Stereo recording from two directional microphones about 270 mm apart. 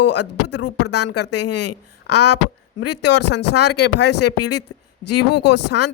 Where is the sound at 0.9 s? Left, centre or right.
Left.